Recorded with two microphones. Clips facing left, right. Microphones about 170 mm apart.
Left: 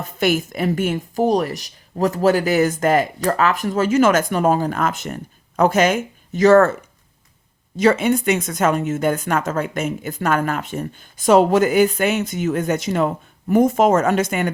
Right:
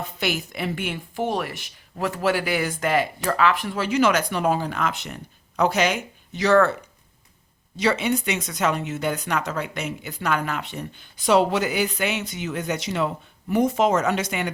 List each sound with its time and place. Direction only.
0.0 s speech: 50° left (ahead or behind)
7.8 s speech: 50° left (ahead or behind)